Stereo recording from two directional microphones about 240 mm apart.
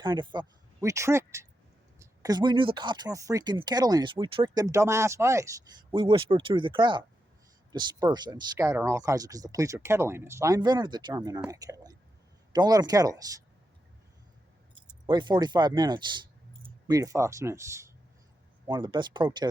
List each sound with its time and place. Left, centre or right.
0.0 s speech: centre
15.0 s speech: centre